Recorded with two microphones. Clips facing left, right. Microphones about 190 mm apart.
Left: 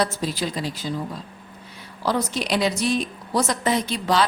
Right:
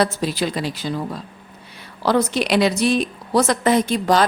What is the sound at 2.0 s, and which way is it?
A woman's voice, 70° right (ahead or behind).